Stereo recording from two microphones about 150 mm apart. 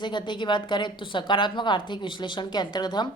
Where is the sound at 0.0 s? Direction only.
30° left (ahead or behind).